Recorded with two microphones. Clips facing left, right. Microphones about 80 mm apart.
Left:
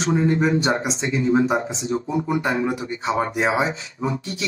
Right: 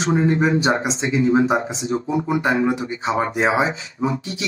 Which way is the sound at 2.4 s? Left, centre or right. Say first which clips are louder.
Right 3 dB; right.